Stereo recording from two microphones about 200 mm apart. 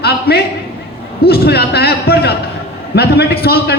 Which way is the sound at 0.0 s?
55° left (ahead or behind).